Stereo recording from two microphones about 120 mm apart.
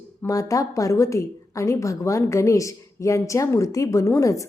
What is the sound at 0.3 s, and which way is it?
A woman's voice, 30° left (ahead or behind).